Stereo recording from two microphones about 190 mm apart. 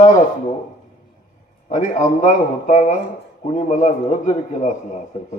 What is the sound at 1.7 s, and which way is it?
A man's voice, 40° left (ahead or behind).